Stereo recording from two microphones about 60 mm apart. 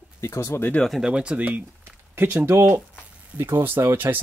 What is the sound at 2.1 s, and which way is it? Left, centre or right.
Speech, right.